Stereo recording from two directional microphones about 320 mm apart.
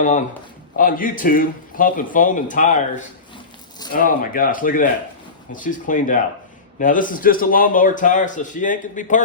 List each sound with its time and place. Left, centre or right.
0.8 s a man's voice: left